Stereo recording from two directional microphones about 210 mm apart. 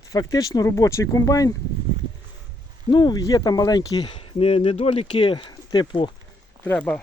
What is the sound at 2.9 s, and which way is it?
Speech, 20° left (ahead or behind).